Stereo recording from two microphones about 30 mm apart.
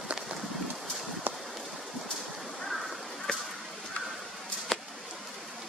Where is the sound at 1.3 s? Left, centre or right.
Right.